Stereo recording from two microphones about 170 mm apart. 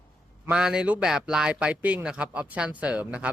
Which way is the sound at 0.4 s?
5° right (ahead or behind).